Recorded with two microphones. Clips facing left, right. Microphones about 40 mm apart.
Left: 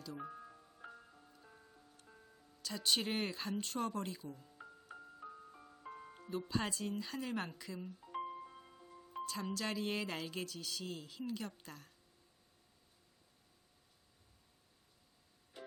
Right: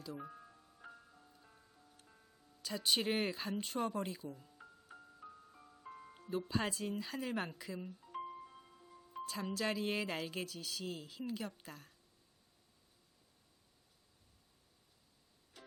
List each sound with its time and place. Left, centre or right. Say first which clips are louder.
0.2 s music: left 2 dB; centre
2.6 s speech: right 1 dB; centre
4.5 s music: left 3 dB; centre
6.5 s speech: even; centre
8.0 s music: left 2 dB; centre
9.2 s speech: right 2 dB; centre
15.6 s music: left 7 dB; centre